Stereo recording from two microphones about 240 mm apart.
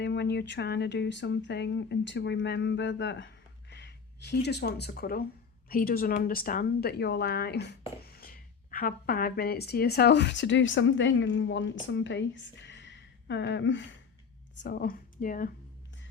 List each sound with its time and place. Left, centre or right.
0.0 s speech: left